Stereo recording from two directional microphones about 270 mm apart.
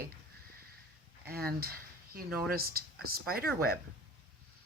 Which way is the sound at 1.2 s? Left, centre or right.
Right.